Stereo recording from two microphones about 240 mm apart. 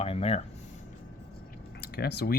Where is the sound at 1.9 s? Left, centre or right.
Left.